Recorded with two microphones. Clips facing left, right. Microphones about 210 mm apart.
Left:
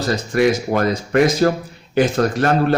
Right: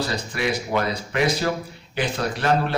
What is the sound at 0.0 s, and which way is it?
A man's voice, 45° left (ahead or behind).